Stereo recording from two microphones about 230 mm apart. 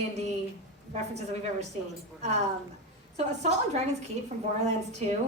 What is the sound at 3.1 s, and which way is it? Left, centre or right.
A woman's voice, right.